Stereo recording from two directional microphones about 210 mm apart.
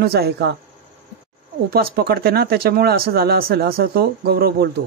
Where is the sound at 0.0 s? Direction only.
50° right (ahead or behind).